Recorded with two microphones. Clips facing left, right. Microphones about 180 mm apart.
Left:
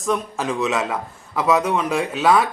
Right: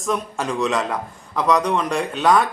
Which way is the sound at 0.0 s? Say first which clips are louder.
Left 1 dB; centre (ahead or behind).